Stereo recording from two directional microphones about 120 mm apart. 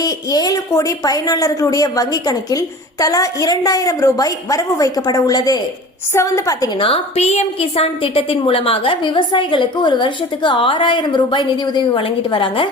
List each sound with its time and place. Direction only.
0.0 s a woman's voice: 30° left (ahead or behind)
6.7 s a woman's voice: 50° left (ahead or behind)